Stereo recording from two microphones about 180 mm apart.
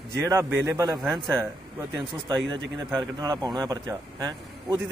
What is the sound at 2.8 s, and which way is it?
A man's voice, 20° right (ahead or behind).